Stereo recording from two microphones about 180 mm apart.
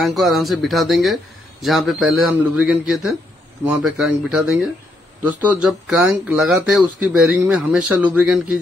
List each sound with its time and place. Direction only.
0.0 s speech: centre (ahead or behind)